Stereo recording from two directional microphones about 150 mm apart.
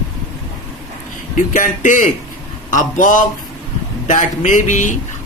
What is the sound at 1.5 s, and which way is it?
Speech, 60° left (ahead or behind).